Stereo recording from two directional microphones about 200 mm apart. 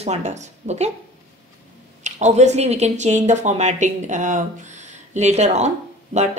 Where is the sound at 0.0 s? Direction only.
35° right (ahead or behind).